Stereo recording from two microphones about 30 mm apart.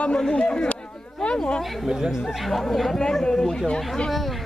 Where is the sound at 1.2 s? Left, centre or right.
Left.